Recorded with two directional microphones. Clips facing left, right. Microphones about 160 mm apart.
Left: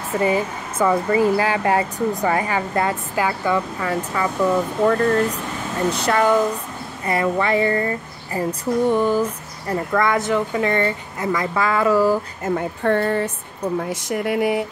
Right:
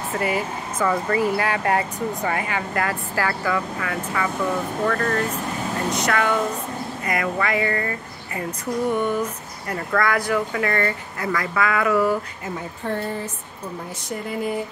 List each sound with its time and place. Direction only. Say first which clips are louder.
0.2 s speech: left 5 dB; 25° left (ahead or behind)
12.4 s speech: left 10 dB; 60° left (ahead or behind)
13.7 s speech: left 5 dB; 75° left (ahead or behind)